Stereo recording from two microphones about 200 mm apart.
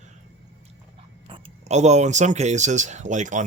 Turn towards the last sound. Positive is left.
turn(degrees=-35)  # may be behind; listen again after turning